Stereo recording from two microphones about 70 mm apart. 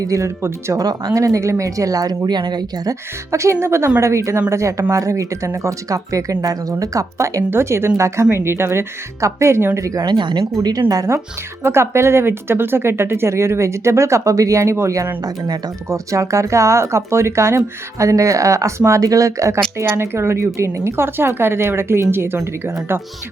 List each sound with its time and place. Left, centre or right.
0.0 s speech: right
0.9 s speech: right
3.3 s speech: right
7.5 s speech: right
9.8 s speech: right
10.6 s speech: right
11.6 s speech: right
19.8 s speech: right